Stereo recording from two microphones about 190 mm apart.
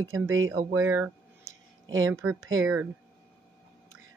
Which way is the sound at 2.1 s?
15° right (ahead or behind).